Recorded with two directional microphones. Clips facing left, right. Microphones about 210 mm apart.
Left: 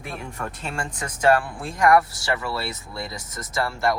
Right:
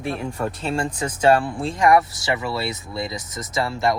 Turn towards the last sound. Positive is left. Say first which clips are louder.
# right 2 dB
turn(degrees=-20)  # may be behind; listen again after turning